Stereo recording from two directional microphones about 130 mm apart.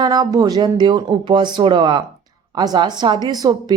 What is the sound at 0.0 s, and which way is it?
Speech, 30° right (ahead or behind).